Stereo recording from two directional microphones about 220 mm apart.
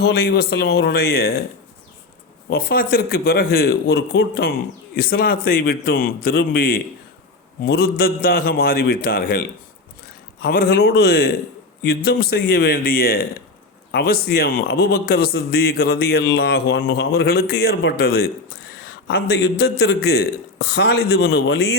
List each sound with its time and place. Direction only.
0.0 s a man's voice: 45° left (ahead or behind)
2.5 s a man's voice: 45° left (ahead or behind)
10.4 s a man's voice: 45° left (ahead or behind)